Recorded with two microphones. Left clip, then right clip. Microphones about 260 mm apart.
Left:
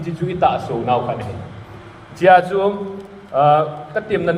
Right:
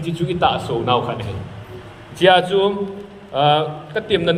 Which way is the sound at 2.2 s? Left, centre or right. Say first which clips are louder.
Left 2 dB; centre.